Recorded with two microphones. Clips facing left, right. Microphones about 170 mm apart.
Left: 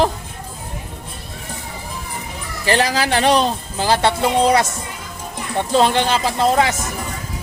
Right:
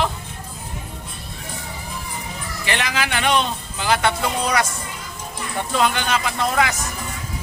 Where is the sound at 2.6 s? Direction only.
35° left (ahead or behind).